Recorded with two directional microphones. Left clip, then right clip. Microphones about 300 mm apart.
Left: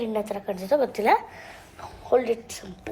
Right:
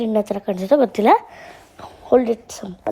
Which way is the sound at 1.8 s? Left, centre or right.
Right.